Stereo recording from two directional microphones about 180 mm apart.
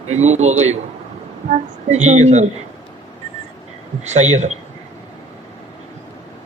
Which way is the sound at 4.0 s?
40° right (ahead or behind).